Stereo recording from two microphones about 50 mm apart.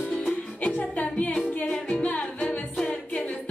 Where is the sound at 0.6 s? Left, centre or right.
Left.